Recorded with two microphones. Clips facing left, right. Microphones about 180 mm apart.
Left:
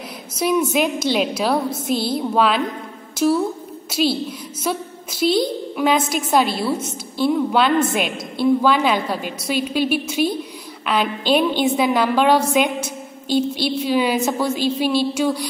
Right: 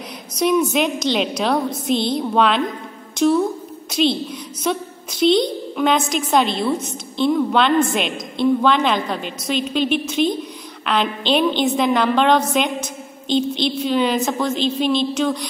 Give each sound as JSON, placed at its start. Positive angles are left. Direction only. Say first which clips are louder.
{"t": 0.4, "sound": "a woman's voice", "louder": "right 1 dB", "side_deg": 5}